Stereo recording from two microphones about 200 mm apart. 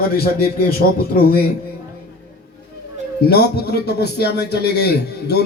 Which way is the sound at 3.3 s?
55° left (ahead or behind).